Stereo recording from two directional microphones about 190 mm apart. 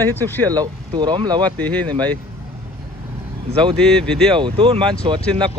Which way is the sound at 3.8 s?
5° left (ahead or behind).